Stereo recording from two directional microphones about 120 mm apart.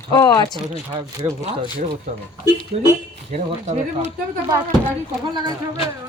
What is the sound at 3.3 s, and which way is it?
Speech, 80° right.